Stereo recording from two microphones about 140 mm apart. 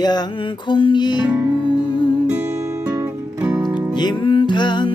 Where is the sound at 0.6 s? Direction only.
35° left (ahead or behind).